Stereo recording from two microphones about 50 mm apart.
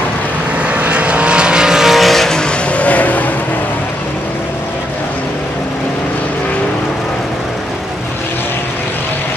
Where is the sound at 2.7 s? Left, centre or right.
Left.